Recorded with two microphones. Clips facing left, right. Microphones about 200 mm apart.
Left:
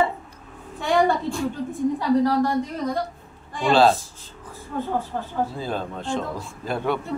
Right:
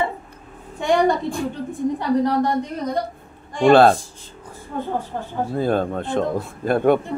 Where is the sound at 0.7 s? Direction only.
15° right (ahead or behind).